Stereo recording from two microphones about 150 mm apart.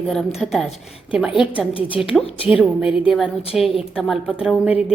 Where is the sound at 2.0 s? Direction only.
Centre (ahead or behind).